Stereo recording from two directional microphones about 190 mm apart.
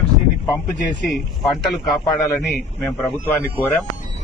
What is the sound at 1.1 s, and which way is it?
Speech, centre (ahead or behind).